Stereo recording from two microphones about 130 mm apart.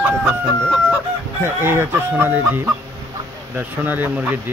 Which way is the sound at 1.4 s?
20° right (ahead or behind).